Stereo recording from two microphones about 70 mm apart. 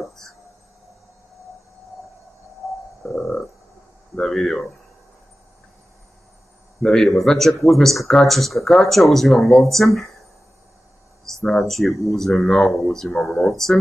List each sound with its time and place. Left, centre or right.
4.1 s speech: centre
6.8 s speech: centre
11.4 s speech: centre
13.1 s speech: left